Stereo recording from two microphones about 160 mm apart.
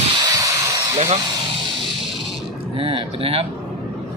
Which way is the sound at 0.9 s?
40° right (ahead or behind).